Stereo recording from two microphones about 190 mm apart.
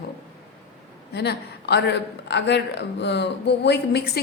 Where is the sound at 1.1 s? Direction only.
60° left (ahead or behind).